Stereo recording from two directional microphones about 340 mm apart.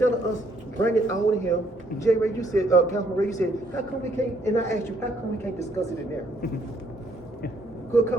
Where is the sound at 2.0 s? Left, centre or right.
Centre.